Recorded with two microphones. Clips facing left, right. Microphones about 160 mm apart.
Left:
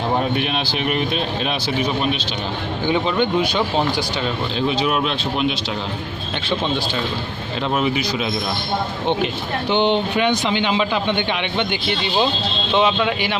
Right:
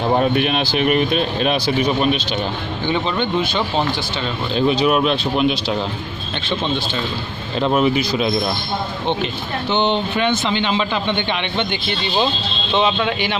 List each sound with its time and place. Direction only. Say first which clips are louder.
0.3 s speech: right 4 dB; 55° right (ahead or behind)
2.8 s speech: left 2 dB; 10° left (ahead or behind)
4.7 s speech: right 6 dB; 50° right (ahead or behind)
7.6 s speech: right 4 dB; 40° right (ahead or behind)
9.0 s speech: left 1 dB; 10° left (ahead or behind)